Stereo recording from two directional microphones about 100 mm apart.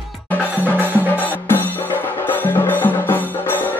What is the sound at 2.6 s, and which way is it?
Music, 20° left (ahead or behind).